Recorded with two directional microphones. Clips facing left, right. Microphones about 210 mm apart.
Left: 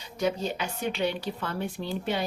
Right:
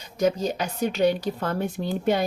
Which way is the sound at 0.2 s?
40° right (ahead or behind).